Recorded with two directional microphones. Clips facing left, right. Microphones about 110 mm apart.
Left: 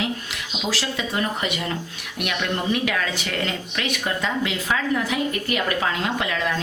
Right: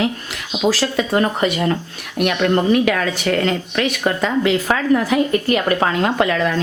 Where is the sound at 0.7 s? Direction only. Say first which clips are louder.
Right 8 dB; 45° right (ahead or behind).